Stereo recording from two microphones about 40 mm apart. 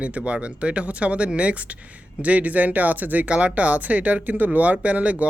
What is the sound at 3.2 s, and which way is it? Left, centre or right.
Speech, right.